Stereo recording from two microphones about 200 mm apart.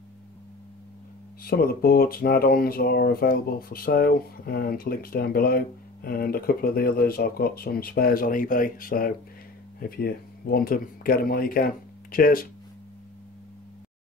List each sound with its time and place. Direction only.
1.4 s speech: 50° left (ahead or behind)